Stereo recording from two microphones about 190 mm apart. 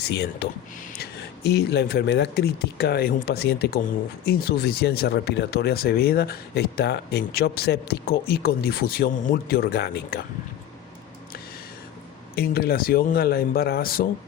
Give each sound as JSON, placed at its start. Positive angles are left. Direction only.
{"t": 0.0, "sound": "speech", "side_deg": 60}
{"t": 1.5, "sound": "speech", "side_deg": 60}
{"t": 12.4, "sound": "speech", "side_deg": 55}